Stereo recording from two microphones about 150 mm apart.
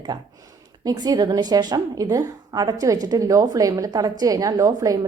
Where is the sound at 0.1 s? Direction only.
25° right (ahead or behind).